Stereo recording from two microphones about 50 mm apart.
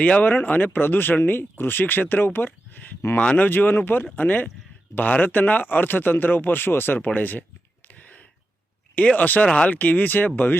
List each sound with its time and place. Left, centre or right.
0.0 s speech: left
0.3 s speech: left
3.2 s speech: left
3.4 s speech: left
7.9 s a sound: left
9.0 s speech: left
9.9 s speech: left